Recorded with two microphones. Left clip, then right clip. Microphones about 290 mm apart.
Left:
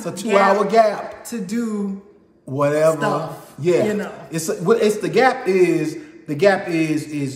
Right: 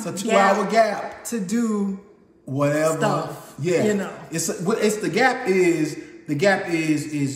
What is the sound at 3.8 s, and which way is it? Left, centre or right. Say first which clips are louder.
Speech: left 1 dB; centre.